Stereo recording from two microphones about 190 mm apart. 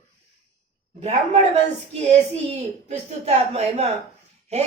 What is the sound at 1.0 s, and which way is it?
A woman's voice, 35° right (ahead or behind).